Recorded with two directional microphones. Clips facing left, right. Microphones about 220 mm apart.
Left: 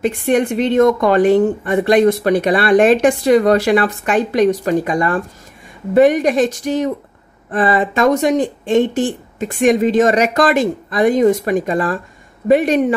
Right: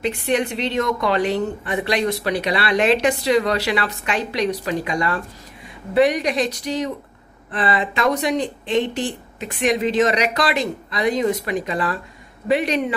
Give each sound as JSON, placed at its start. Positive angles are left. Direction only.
{"t": 0.0, "sound": "speech", "side_deg": 50}